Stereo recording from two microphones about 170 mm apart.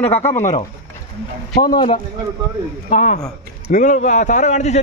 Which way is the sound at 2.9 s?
45° left (ahead or behind).